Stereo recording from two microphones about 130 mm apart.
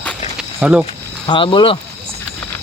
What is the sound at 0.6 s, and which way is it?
Speech, 10° right (ahead or behind).